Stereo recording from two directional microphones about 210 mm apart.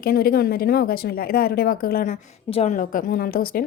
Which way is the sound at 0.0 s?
45° left (ahead or behind).